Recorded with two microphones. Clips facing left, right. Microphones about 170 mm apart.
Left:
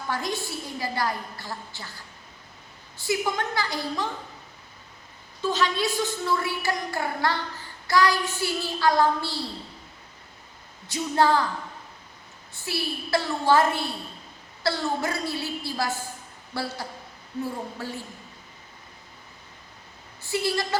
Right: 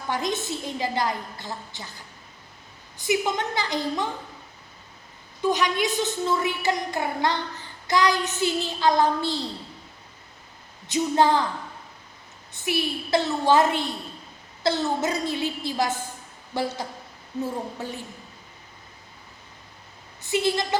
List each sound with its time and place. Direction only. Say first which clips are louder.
0.1 s a woman's voice: right 3 dB; 20° right (ahead or behind)
5.4 s a woman's voice: right 2 dB; 15° right (ahead or behind)
10.8 s a woman's voice: right 2 dB; 20° right (ahead or behind)
12.5 s a woman's voice: right 4 dB; 20° right (ahead or behind)
20.2 s a woman's voice: right 3 dB; 20° right (ahead or behind)